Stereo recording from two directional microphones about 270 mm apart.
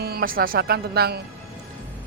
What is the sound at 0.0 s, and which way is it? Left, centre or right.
Speech, right.